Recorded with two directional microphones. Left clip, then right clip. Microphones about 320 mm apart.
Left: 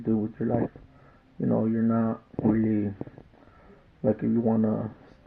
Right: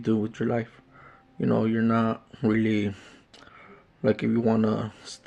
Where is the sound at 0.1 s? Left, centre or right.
Right.